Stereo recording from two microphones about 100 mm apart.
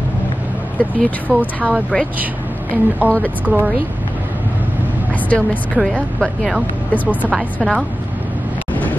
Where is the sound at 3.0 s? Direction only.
15° right (ahead or behind).